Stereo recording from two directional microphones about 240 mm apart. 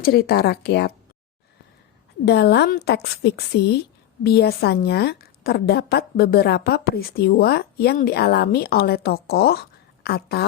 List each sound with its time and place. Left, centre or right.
0.0 s a woman's voice: left
2.2 s a woman's voice: left